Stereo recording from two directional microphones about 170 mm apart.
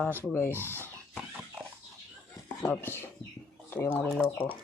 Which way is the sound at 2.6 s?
15° left (ahead or behind).